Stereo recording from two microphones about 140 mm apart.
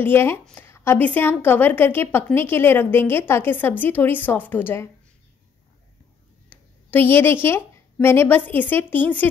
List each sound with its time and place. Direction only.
0.0 s a woman's voice: 15° left (ahead or behind)
6.5 s a sound: 15° left (ahead or behind)
7.4 s a woman's voice: 15° left (ahead or behind)